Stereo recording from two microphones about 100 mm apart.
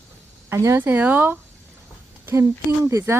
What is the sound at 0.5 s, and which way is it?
Speech, 25° right (ahead or behind).